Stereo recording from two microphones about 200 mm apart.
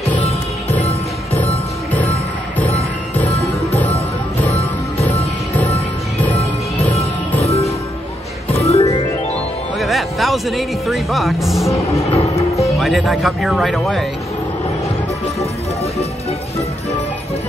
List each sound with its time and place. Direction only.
3.3 s music: 30° left (ahead or behind)
6.3 s music: 30° left (ahead or behind)
9.8 s speech: centre (ahead or behind)
11.7 s music: 30° left (ahead or behind)
12.7 s speech: centre (ahead or behind)
15.8 s speech: 30° left (ahead or behind)